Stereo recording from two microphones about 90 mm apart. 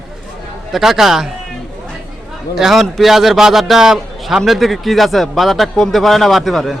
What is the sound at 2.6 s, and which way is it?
A man's voice, centre (ahead or behind).